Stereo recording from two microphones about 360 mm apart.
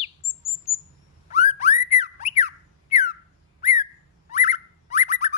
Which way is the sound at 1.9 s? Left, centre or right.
Centre.